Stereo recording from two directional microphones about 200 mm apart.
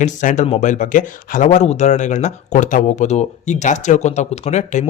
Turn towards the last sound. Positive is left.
turn(degrees=35)  # may be behind; listen again after turning